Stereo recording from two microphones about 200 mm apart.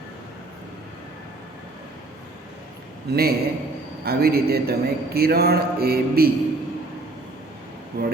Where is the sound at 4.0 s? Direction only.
50° right (ahead or behind).